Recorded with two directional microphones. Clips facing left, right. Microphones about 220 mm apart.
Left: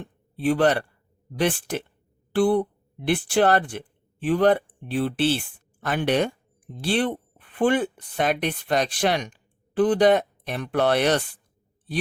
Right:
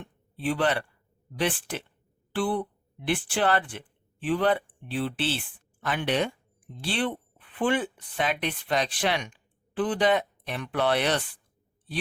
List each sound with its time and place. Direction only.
0.0 s speech: 45° left (ahead or behind)